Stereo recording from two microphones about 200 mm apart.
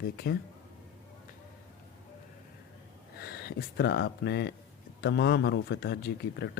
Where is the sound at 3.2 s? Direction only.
55° left (ahead or behind).